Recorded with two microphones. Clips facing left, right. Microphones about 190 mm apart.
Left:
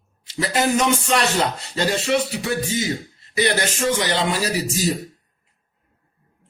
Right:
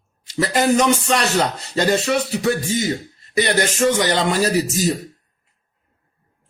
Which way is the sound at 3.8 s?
45° right (ahead or behind).